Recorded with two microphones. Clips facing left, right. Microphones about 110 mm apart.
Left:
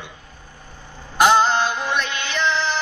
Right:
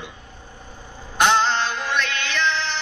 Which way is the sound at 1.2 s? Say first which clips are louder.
Left 3 dB; 5° left (ahead or behind).